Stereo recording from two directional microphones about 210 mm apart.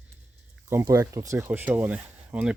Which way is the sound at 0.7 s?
15° right (ahead or behind).